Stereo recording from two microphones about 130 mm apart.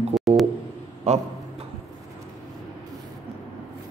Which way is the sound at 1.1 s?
55° right (ahead or behind).